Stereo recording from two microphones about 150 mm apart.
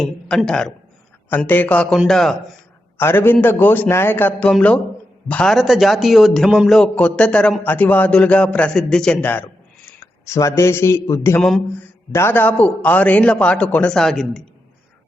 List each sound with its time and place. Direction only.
0.0 s a man's voice: 5° left (ahead or behind)
3.0 s a man's voice: 15° left (ahead or behind)
11.3 s a man's voice: centre (ahead or behind)
11.8 s a man's voice: 15° left (ahead or behind)